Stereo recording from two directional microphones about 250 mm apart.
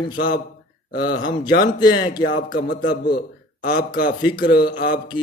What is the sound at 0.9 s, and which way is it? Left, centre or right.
Speech, left.